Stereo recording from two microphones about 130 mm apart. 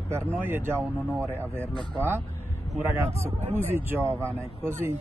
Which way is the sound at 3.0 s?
20° right (ahead or behind).